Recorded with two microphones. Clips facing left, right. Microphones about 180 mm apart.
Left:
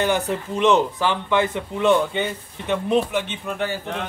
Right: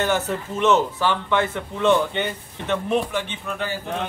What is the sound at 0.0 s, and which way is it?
Speech, 15° left (ahead or behind).